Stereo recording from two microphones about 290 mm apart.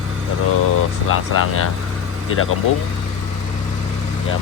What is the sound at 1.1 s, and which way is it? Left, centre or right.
Speech, left.